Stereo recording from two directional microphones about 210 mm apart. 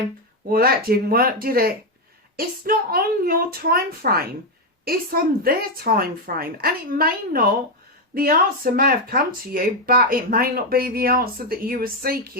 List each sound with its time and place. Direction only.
0.5 s speech: 45° right (ahead or behind)